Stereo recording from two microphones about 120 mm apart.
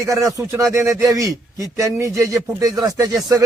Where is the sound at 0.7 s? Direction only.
5° right (ahead or behind).